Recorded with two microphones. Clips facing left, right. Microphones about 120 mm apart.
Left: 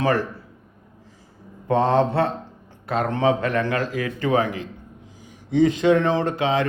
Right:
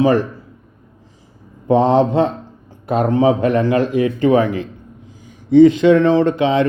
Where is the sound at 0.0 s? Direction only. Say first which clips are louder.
Right 7 dB; 20° right (ahead or behind).